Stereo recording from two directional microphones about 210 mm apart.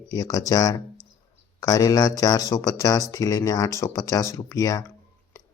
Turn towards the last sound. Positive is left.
turn(degrees=15)  # may be behind; listen again after turning